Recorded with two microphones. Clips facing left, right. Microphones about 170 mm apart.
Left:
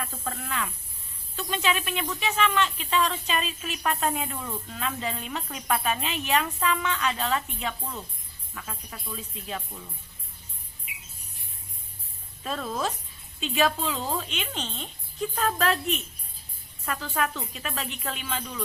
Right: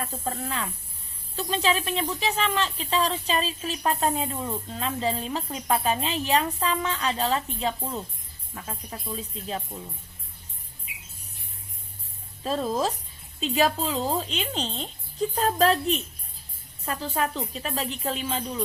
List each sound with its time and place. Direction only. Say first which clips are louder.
0.0 s speech: right 4 dB; 35° right (ahead or behind)
12.4 s speech: right 4 dB; 30° right (ahead or behind)